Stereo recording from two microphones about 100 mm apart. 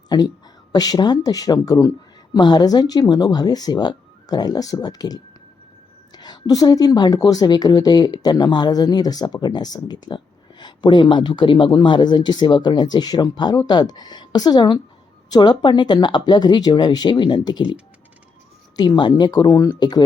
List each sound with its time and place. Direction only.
0.1 s speech: 45° left (ahead or behind)
18.8 s speech: 50° left (ahead or behind)